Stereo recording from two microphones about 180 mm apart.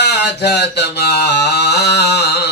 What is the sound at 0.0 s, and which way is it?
Mantra, 70° left (ahead or behind).